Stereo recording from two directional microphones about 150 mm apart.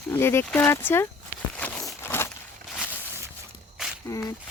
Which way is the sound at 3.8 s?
5° right (ahead or behind).